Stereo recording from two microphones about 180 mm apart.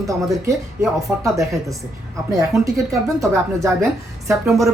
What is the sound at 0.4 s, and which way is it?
Speech, 15° right (ahead or behind).